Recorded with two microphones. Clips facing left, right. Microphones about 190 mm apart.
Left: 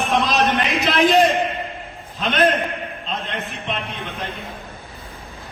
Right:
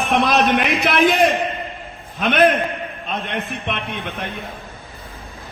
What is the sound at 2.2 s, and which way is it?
Speech, 60° right (ahead or behind).